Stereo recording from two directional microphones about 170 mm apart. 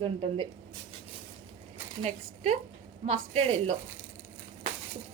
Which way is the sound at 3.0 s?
40° right (ahead or behind).